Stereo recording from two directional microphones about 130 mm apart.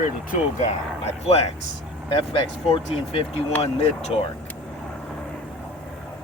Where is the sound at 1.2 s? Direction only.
55° left (ahead or behind).